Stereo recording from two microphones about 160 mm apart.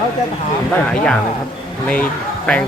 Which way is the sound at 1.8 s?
10° left (ahead or behind).